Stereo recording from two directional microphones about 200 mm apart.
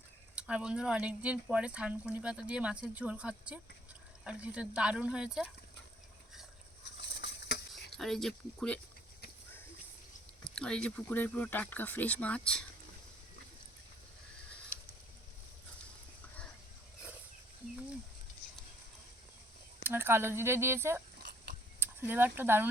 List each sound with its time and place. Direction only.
0.3 s speech: 5° right (ahead or behind)
7.2 s stir: 60° left (ahead or behind)
7.9 s speech: centre (ahead or behind)
10.4 s speech: 5° left (ahead or behind)
19.8 s speech: 10° right (ahead or behind)
21.2 s dog: 55° right (ahead or behind)
21.8 s speech: 10° right (ahead or behind)